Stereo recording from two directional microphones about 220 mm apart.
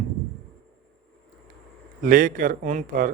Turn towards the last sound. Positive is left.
turn(degrees=-35)  # may be behind; listen again after turning